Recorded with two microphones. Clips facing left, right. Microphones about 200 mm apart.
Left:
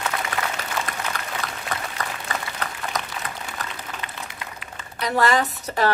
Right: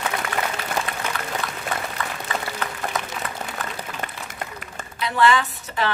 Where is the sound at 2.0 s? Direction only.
40° left (ahead or behind).